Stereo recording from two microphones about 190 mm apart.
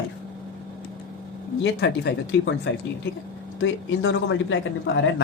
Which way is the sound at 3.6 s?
85° left.